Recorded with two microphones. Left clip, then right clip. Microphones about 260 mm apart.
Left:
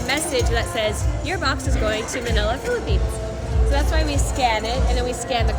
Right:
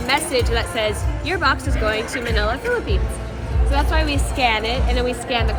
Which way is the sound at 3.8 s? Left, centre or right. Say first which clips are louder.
Right 6 dB; centre.